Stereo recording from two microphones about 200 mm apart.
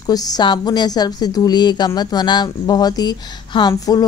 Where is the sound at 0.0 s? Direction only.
20° left (ahead or behind).